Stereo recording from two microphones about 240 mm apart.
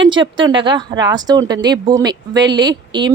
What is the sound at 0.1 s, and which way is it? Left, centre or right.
Speech, centre.